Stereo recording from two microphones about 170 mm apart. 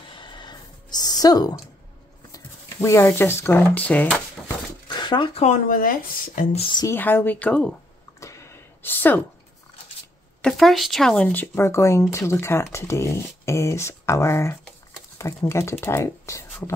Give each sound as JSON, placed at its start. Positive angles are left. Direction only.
{"t": 0.2, "sound": "a sound", "side_deg": 25}
{"t": 2.3, "sound": "speech", "side_deg": 15}
{"t": 4.8, "sound": "zipper", "side_deg": 25}
{"t": 5.4, "sound": "speech", "side_deg": 50}
{"t": 6.8, "sound": "speech", "side_deg": 15}
{"t": 8.2, "sound": "a sound", "side_deg": 15}
{"t": 10.4, "sound": "speech", "side_deg": 0}